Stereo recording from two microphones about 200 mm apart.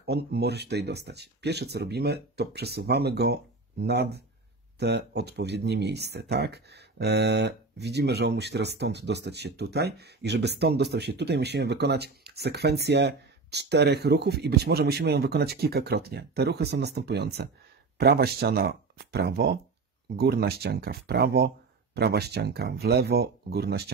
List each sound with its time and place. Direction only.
0.0 s speech: 55° right (ahead or behind)